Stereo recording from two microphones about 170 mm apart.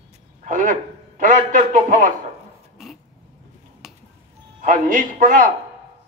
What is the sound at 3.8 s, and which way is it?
Finger snapping, centre (ahead or behind).